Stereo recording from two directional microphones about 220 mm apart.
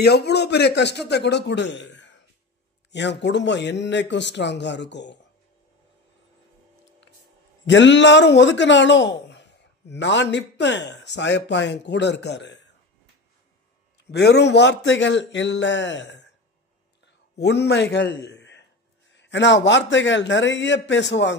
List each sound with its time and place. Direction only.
0.0 s a man's voice: 50° left (ahead or behind)
7.6 s a man's voice: 55° left (ahead or behind)
14.1 s a man's voice: 50° left (ahead or behind)
17.0 s a sound: 50° left (ahead or behind)
19.1 s a man's voice: 55° left (ahead or behind)